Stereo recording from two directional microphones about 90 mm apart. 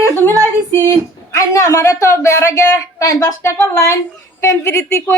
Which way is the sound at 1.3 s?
35° left (ahead or behind).